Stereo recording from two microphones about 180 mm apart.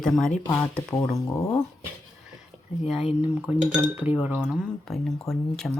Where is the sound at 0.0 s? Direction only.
Centre (ahead or behind).